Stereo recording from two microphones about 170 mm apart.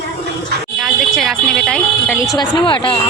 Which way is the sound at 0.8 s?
Centre (ahead or behind).